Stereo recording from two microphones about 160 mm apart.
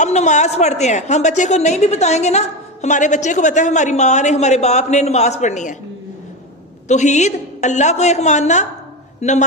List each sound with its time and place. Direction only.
0.0 s a woman's voice: 45° left (ahead or behind)
6.8 s a woman's voice: 45° left (ahead or behind)